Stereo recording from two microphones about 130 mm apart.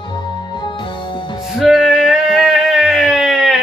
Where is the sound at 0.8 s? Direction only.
35° left (ahead or behind).